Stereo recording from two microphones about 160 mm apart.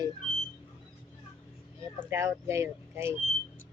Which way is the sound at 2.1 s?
15° right (ahead or behind).